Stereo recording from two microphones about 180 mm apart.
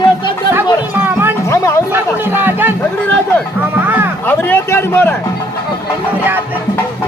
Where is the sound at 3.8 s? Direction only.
10° right (ahead or behind).